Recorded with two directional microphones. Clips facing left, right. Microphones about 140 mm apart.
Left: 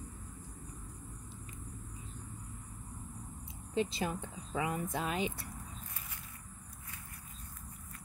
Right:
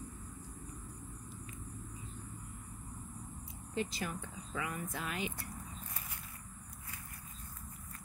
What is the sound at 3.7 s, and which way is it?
Speech, 25° left (ahead or behind).